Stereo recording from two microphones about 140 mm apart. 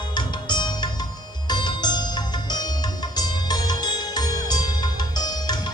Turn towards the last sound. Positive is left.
turn(degrees=30)  # may be behind; listen again after turning